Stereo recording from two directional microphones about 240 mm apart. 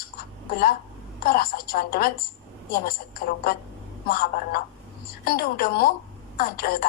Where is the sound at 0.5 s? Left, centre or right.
Left.